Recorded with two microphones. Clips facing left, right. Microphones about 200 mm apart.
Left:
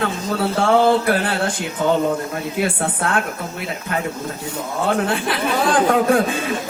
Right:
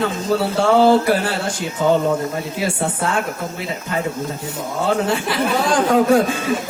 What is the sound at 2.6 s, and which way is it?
Speech, 55° left (ahead or behind).